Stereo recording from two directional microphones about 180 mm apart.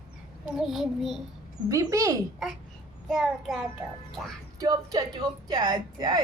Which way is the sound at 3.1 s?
Centre (ahead or behind).